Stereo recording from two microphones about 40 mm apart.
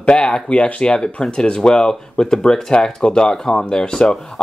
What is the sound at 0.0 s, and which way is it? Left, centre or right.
Speech, left.